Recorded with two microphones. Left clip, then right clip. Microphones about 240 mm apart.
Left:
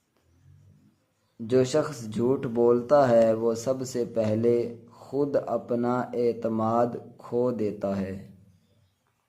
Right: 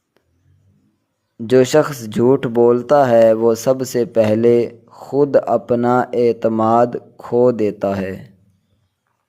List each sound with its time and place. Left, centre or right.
1.4 s speech: right